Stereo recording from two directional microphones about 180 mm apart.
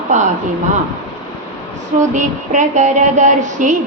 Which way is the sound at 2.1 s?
40° right (ahead or behind).